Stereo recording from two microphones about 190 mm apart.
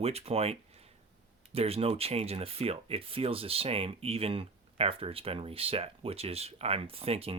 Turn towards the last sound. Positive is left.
turn(degrees=-30)  # may be behind; listen again after turning